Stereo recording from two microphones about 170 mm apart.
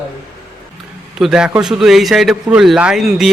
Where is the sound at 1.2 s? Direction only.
5° right (ahead or behind).